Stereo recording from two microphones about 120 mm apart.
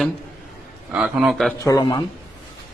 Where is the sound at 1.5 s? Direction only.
25° left (ahead or behind).